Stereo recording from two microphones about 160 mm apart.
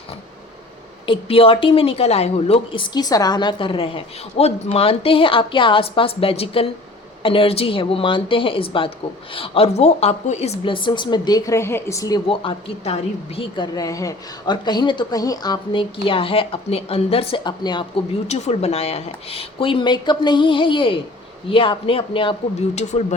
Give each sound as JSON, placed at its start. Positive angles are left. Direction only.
{"t": 1.0, "sound": "a woman's voice", "side_deg": 35}
{"t": 2.9, "sound": "a woman's voice", "side_deg": 25}
{"t": 12.3, "sound": "a woman's voice", "side_deg": 35}
{"t": 18.3, "sound": "a woman's voice", "side_deg": 45}
{"t": 22.7, "sound": "speech", "side_deg": 45}